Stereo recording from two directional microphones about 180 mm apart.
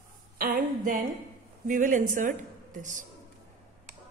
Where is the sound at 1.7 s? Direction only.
45° right (ahead or behind).